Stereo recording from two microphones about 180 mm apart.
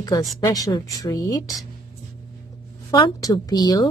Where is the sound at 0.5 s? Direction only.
20° left (ahead or behind).